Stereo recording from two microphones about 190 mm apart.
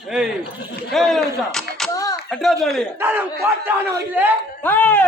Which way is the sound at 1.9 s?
20° left (ahead or behind).